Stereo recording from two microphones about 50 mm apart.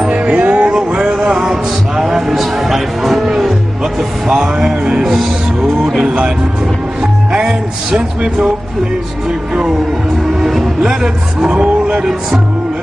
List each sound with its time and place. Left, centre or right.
0.1 s music: right
0.7 s a sound: centre
5.1 s music: centre
5.9 s music: centre
10.4 s music: centre